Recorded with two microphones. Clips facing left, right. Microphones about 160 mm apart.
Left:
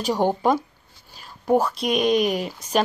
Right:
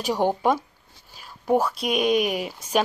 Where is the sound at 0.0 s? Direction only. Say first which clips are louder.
Left 1 dB; 5° right (ahead or behind).